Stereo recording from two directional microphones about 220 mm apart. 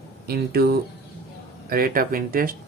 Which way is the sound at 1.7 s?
40° right (ahead or behind).